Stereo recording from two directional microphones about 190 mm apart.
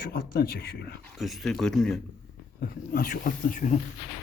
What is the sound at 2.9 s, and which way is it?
Speech, 45° left (ahead or behind).